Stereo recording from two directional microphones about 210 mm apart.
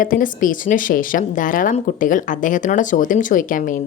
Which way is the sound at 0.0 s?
40° left (ahead or behind).